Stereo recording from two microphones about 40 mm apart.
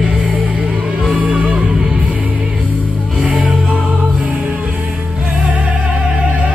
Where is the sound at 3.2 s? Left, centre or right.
Right.